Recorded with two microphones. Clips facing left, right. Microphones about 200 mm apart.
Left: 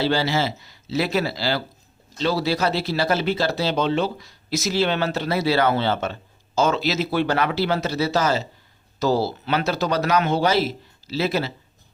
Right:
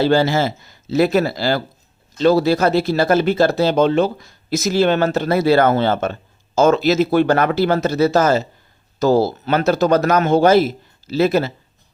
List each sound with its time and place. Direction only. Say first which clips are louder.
0.0 s speech: right 6 dB; 50° right (ahead or behind)